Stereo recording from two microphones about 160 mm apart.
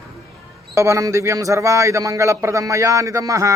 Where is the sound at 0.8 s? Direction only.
20° right (ahead or behind).